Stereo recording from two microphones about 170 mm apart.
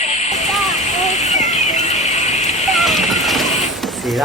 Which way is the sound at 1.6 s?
45° left (ahead or behind).